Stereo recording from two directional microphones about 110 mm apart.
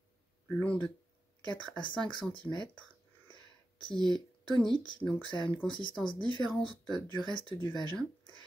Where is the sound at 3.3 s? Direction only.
45° left (ahead or behind).